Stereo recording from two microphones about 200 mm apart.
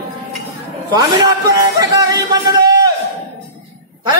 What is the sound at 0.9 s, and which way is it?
A man's voice, 20° right (ahead or behind).